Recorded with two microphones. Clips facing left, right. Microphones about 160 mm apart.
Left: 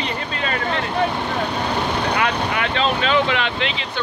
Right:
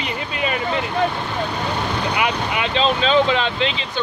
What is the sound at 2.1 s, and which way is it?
Speech, 15° right (ahead or behind).